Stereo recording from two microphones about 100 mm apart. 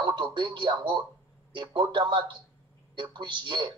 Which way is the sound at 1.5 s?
55° right (ahead or behind).